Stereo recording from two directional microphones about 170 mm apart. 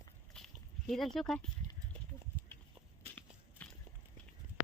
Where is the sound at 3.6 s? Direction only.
10° left (ahead or behind).